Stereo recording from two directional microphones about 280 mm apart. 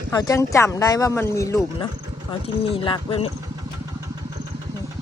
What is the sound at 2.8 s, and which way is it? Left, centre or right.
Speech, centre.